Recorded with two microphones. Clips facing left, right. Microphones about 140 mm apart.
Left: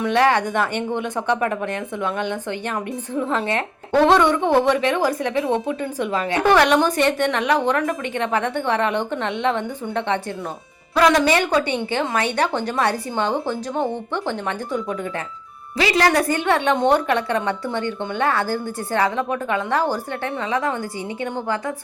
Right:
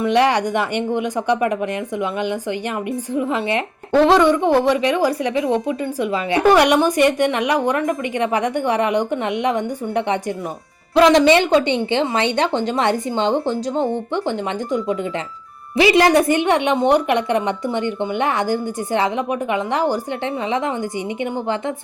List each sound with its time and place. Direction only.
0.1 s a woman's voice: 15° right (ahead or behind)